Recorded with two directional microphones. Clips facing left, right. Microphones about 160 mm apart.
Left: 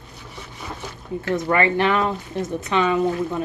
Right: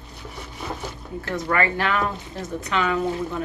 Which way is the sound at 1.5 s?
20° left (ahead or behind).